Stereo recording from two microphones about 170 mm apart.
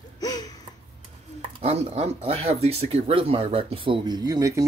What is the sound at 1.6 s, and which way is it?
Speech, 40° right (ahead or behind).